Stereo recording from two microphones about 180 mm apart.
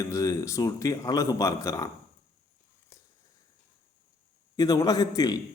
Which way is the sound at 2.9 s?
15° left (ahead or behind).